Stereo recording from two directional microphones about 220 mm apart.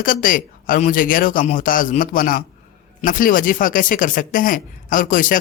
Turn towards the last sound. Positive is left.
turn(degrees=35)  # may be behind; listen again after turning